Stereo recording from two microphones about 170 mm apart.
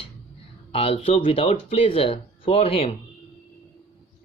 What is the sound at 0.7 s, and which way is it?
Speech, 35° left (ahead or behind).